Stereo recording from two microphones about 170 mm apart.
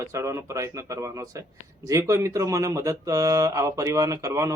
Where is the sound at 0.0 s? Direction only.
15° right (ahead or behind).